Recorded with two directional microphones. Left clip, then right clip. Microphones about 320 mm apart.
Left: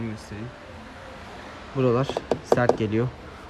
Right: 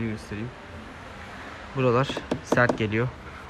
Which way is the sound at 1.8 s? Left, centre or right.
Centre.